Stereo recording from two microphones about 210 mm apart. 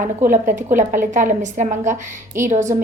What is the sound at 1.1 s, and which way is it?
A woman's voice, 35° right (ahead or behind).